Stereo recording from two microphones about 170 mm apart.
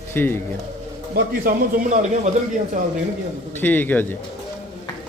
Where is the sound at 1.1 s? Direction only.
55° right (ahead or behind).